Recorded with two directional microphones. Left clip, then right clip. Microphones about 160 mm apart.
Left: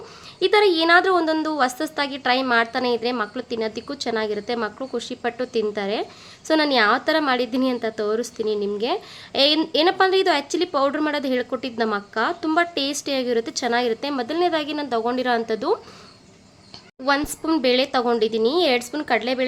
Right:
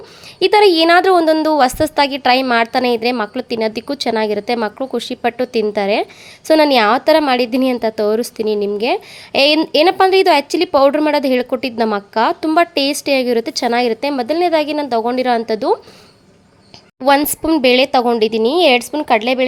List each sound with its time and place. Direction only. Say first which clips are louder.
0.3 s a woman's voice: right 7 dB; 45° right (ahead or behind)
17.2 s a woman's voice: right 8 dB; 35° right (ahead or behind)